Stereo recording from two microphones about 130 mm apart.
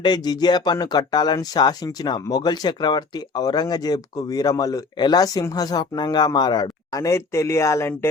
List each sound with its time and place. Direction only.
0.0 s speech: 30° left (ahead or behind)